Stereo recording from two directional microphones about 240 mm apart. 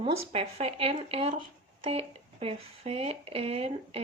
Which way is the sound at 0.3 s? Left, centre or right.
Right.